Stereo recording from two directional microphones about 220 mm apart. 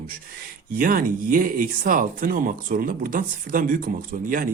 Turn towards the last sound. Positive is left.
turn(degrees=-40)  # may be behind; listen again after turning